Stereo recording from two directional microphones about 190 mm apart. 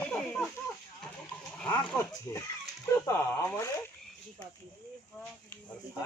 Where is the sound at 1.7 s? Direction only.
10° left (ahead or behind).